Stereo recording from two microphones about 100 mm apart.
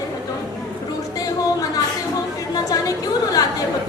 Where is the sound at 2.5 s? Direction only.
35° left (ahead or behind).